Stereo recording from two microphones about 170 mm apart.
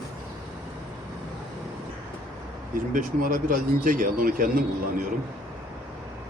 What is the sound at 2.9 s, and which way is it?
Speech, 55° right (ahead or behind).